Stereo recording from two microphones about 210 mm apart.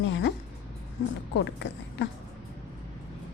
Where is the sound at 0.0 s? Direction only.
60° left (ahead or behind).